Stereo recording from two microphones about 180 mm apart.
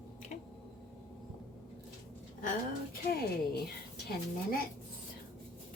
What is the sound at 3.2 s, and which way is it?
Speech, 60° left (ahead or behind).